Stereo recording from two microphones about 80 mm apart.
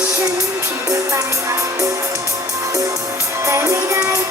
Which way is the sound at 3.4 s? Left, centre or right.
Right.